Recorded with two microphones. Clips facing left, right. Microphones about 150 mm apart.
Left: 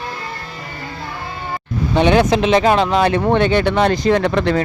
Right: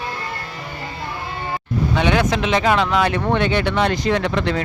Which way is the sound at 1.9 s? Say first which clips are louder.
Left 6 dB; 30° left (ahead or behind).